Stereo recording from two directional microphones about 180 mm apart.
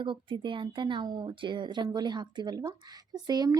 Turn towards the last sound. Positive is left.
turn(degrees=-20)  # may be behind; listen again after turning